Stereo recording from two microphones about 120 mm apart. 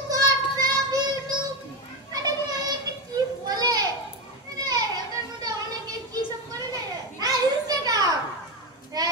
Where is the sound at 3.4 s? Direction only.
35° right (ahead or behind).